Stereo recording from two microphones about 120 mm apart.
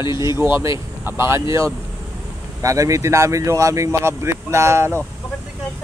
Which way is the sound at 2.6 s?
25° right (ahead or behind).